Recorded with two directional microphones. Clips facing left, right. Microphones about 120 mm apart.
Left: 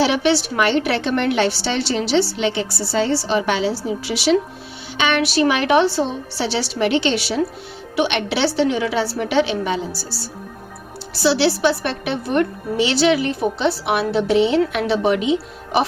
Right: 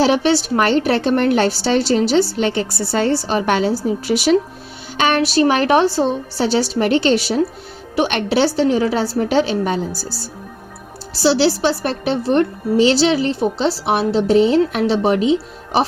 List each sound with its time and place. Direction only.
0.0 s a woman's voice: 40° right (ahead or behind)
11.2 s a woman's voice: 35° right (ahead or behind)